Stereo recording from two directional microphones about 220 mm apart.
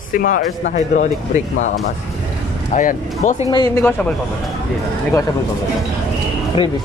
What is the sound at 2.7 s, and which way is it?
Speech, 35° left (ahead or behind).